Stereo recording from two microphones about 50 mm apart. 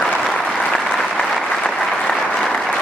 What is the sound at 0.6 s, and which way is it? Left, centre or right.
Applause, centre.